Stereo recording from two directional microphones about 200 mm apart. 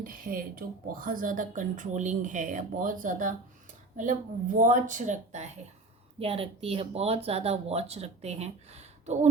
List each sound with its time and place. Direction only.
0.0 s speech: 45° right (ahead or behind)